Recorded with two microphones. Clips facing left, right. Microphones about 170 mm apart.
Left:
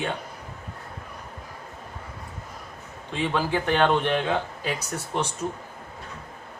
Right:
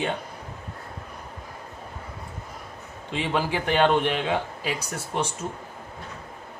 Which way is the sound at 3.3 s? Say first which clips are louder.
Even; 10° right (ahead or behind).